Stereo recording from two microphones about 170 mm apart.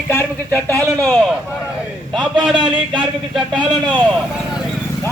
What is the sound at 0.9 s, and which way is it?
Speech, 10° left (ahead or behind).